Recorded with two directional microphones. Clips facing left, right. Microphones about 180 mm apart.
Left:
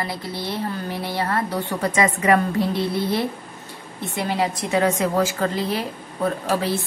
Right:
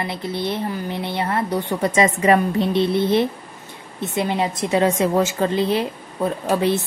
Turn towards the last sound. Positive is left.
turn(degrees=-20)  # may be behind; listen again after turning